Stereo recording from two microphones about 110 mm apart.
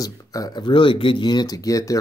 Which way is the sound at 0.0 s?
35° left (ahead or behind).